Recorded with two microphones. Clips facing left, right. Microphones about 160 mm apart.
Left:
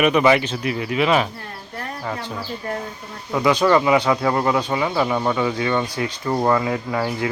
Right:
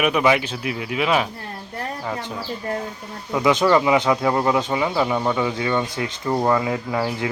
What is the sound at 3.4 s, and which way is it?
Speech, 20° right (ahead or behind).